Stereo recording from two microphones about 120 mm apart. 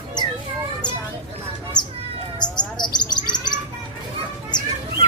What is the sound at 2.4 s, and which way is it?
Bird, 35° left (ahead or behind).